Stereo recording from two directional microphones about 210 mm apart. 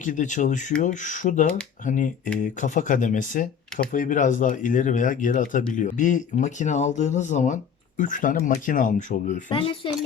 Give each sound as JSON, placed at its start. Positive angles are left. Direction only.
{"t": 0.0, "sound": "speech", "side_deg": 40}
{"t": 9.5, "sound": "speech", "side_deg": 25}